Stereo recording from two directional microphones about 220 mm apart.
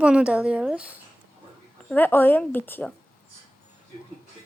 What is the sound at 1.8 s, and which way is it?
A woman's voice, 10° left (ahead or behind).